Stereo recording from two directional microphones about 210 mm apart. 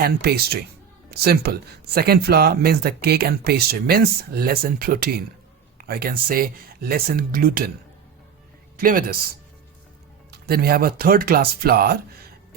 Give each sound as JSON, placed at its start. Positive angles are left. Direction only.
{"t": 0.0, "sound": "speech", "side_deg": -50}
{"t": 8.8, "sound": "speech", "side_deg": -40}
{"t": 10.3, "sound": "speech", "side_deg": -50}